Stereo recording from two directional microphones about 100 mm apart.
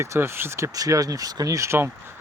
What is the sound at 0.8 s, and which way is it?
Speech, 35° right (ahead or behind).